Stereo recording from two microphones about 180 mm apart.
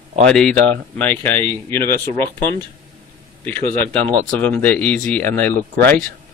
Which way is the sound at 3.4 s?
10° left (ahead or behind).